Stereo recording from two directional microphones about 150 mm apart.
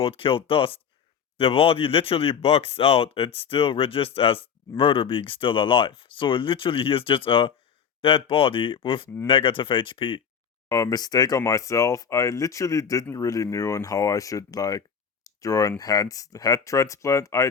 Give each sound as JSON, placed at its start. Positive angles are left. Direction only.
{"t": 0.0, "sound": "speech", "side_deg": 35}
{"t": 10.7, "sound": "speech", "side_deg": 25}